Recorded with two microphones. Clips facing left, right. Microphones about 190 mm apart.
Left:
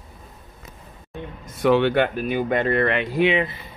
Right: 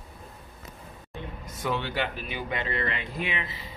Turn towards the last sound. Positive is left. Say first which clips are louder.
# left 13 dB
turn(degrees=55)  # may be behind; listen again after turning